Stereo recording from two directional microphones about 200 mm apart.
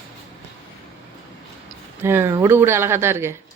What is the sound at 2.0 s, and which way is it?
A woman's voice, 10° right (ahead or behind).